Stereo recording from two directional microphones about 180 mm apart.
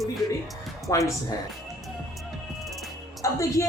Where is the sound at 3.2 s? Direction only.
15° left (ahead or behind).